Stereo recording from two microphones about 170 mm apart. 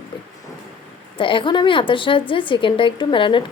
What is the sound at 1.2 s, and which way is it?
A woman's voice, 30° left (ahead or behind).